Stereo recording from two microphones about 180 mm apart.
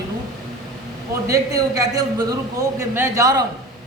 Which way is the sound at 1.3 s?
20° right (ahead or behind).